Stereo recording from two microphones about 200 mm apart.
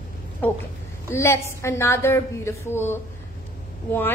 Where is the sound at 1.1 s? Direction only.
15° left (ahead or behind).